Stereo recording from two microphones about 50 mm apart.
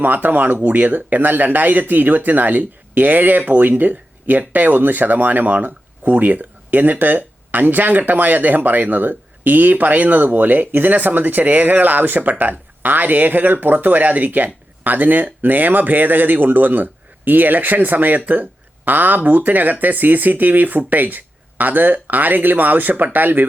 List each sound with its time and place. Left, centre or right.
0.0 s speech: right